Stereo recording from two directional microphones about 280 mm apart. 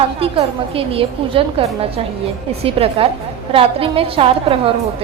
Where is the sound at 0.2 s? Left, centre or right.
Centre.